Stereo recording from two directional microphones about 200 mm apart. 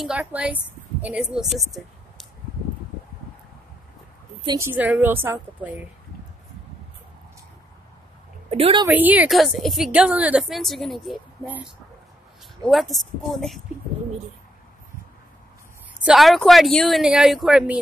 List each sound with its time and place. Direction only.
0.0 s a woman's voice: 5° right (ahead or behind)
4.6 s a woman's voice: 10° right (ahead or behind)
8.5 s a woman's voice: 30° right (ahead or behind)
8.8 s a woman's voice: 10° right (ahead or behind)
16.1 s a woman's voice: centre (ahead or behind)